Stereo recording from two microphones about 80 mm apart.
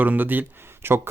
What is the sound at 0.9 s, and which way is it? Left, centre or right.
Speech, right.